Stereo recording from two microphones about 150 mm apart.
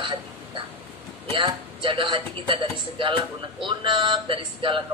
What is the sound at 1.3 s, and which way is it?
A man's voice, 35° right (ahead or behind).